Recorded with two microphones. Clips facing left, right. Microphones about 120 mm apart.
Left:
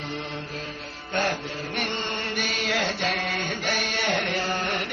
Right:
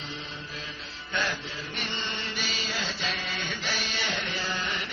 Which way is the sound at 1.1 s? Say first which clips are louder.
Left 5 dB; 50° left (ahead or behind).